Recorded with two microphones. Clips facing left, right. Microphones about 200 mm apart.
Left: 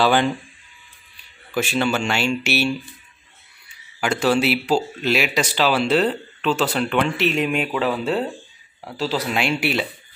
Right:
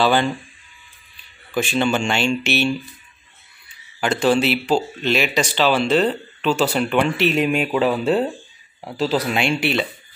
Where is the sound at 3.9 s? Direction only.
10° left (ahead or behind); by 9.3 s 15° right (ahead or behind).